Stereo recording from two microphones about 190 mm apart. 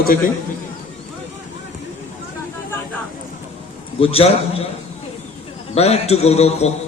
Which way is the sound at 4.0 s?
30° left (ahead or behind).